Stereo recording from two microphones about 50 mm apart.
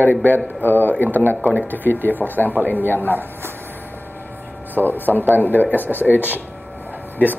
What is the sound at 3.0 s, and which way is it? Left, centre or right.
Speech, right.